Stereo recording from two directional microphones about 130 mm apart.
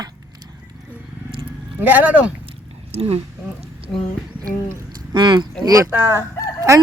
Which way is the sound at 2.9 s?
50° right (ahead or behind).